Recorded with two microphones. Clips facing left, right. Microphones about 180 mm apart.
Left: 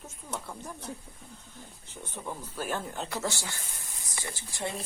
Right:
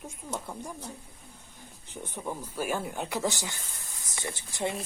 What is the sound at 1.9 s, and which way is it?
Speech, 15° right (ahead or behind).